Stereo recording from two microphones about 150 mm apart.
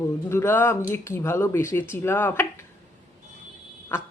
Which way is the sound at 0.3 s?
15° left (ahead or behind).